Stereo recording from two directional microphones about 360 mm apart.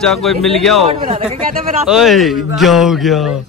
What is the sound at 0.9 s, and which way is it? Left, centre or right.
A man's voice, centre.